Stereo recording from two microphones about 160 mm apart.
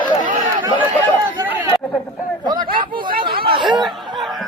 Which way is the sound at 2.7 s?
65° right (ahead or behind).